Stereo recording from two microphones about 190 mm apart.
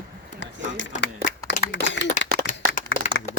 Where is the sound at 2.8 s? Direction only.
40° left (ahead or behind).